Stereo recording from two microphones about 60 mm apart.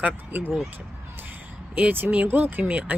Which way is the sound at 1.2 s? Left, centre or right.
Right.